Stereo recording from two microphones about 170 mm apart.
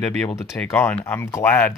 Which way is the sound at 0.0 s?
5° left (ahead or behind).